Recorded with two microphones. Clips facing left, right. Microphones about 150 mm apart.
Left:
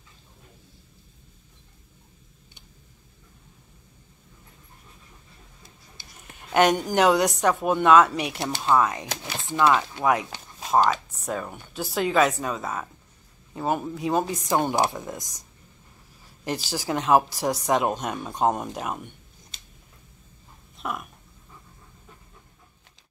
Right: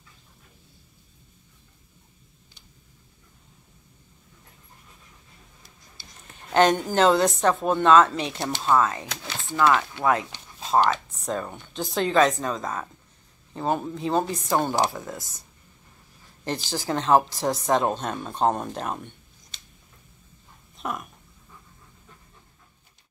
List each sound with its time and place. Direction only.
6.5 s speech: 10° left (ahead or behind)
16.4 s speech: 10° left (ahead or behind)
20.7 s dog: centre (ahead or behind)